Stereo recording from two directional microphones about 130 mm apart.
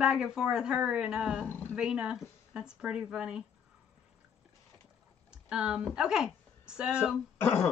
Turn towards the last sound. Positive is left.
turn(degrees=15)  # may be behind; listen again after turning